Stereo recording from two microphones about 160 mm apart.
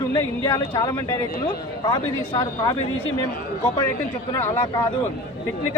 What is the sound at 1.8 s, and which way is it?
Speech, 35° left (ahead or behind).